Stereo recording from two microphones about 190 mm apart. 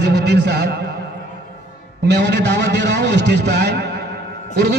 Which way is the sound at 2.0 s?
65° right (ahead or behind).